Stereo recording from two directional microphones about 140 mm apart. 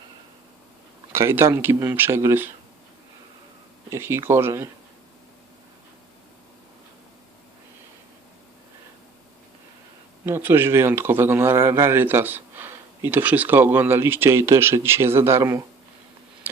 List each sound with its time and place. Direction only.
1.1 s a man's voice: 20° right (ahead or behind)
3.8 s a man's voice: 20° right (ahead or behind)
10.2 s a man's voice: 15° right (ahead or behind)